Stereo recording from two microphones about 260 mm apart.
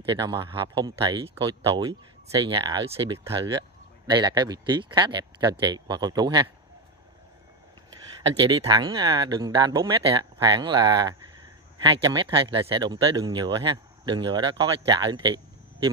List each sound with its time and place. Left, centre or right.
0.1 s speech: centre
8.4 s speech: centre